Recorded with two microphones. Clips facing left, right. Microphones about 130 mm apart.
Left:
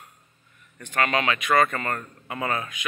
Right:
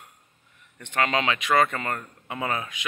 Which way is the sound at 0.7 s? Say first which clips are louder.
Even; 20° right (ahead or behind).